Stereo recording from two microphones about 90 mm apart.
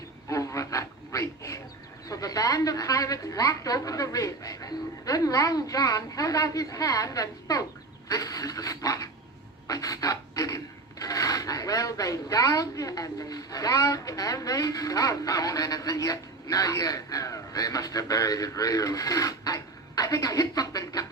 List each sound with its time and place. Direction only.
0.3 s a sound: 35° left (ahead or behind)
2.0 s speech: 40° left (ahead or behind)
9.6 s pant: 40° left (ahead or behind)
11.0 s speech: 40° left (ahead or behind)